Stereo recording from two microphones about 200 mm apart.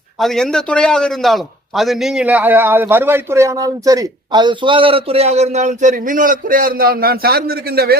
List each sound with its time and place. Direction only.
0.2 s a man's voice: centre (ahead or behind); by 7.9 s 50° right (ahead or behind)